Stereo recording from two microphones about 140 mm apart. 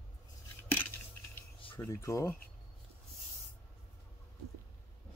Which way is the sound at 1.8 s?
20° left (ahead or behind).